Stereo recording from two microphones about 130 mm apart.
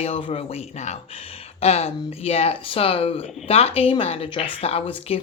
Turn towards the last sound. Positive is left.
turn(degrees=50)  # may be behind; listen again after turning